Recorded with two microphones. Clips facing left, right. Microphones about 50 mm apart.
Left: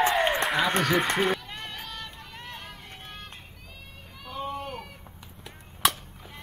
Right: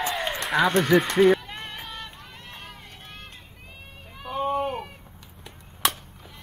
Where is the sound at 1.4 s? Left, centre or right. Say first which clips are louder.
Right 1 dB; centre.